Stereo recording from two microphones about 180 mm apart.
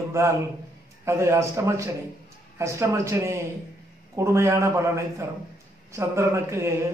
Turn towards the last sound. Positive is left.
turn(degrees=-15)  # may be behind; listen again after turning